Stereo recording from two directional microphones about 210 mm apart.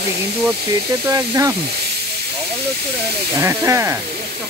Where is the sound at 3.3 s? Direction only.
15° right (ahead or behind).